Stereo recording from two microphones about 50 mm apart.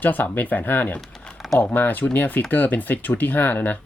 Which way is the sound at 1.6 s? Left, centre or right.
Left.